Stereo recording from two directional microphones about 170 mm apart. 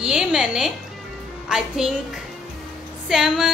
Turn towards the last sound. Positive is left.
turn(degrees=-5)  # may be behind; listen again after turning